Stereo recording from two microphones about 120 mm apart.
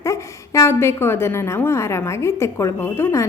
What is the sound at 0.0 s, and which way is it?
A woman's voice, 25° left (ahead or behind).